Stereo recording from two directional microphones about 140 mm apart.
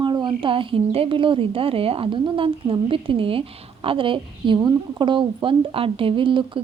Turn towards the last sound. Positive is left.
turn(degrees=-40)  # may be behind; listen again after turning